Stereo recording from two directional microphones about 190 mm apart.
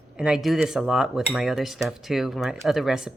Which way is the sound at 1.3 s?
Centre (ahead or behind).